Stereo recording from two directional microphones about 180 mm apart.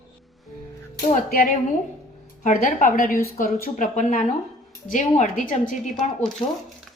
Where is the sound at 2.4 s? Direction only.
45° left (ahead or behind).